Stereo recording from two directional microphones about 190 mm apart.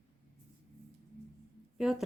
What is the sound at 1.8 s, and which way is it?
Speech, centre (ahead or behind).